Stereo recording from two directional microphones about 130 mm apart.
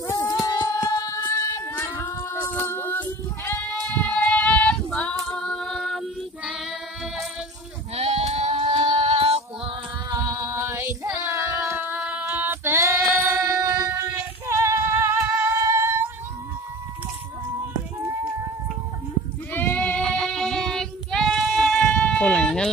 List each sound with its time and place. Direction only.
0.0 s singing: 25° left (ahead or behind)
0.5 s music: 30° left (ahead or behind)
2.5 s female singing: 15° left (ahead or behind); by 6.5 s centre (ahead or behind)
7.9 s sheep: 55° right (ahead or behind)
9.0 s music: 50° right (ahead or behind)
10.2 s music: 25° right (ahead or behind)
11.1 s child singing: 15° right (ahead or behind)
13.3 s female singing: 25° right (ahead or behind)
19.5 s child singing: 10° left (ahead or behind)